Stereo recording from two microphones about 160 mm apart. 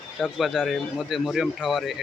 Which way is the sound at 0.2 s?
Centre (ahead or behind).